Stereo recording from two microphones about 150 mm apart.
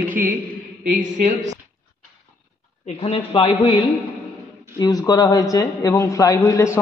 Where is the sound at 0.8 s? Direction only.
55° right (ahead or behind).